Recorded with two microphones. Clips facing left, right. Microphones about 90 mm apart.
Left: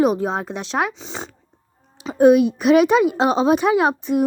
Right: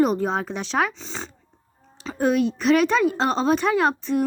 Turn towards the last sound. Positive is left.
turn(degrees=15)  # may be behind; listen again after turning